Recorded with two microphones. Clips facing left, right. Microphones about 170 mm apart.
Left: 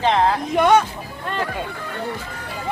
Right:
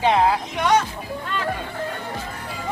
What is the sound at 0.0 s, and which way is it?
Speech, 10° right (ahead or behind).